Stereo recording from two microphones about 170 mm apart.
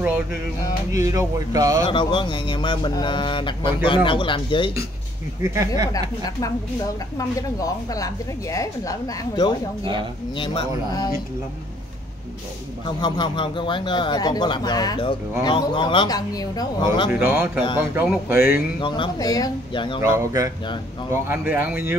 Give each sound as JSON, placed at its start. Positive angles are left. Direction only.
{"t": 0.9, "sound": "speech", "side_deg": -20}
{"t": 1.9, "sound": "speech", "side_deg": 30}
{"t": 5.4, "sound": "speech", "side_deg": -20}
{"t": 5.9, "sound": "speech", "side_deg": 20}
{"t": 12.8, "sound": "speech", "side_deg": 25}
{"t": 17.1, "sound": "speech", "side_deg": -10}
{"t": 18.8, "sound": "speech", "side_deg": 30}
{"t": 20.0, "sound": "speech", "side_deg": -20}